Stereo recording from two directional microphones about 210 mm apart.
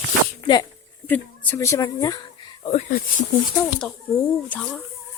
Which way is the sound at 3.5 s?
Centre (ahead or behind).